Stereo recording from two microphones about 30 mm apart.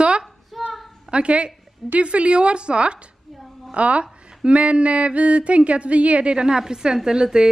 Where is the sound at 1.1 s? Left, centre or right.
Right.